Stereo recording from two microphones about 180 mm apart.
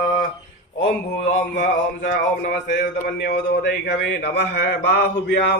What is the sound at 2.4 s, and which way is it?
A man's voice, 60° left (ahead or behind).